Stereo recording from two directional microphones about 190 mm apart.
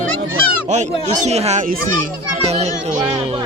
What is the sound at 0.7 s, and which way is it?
A child's voice, 35° right (ahead or behind).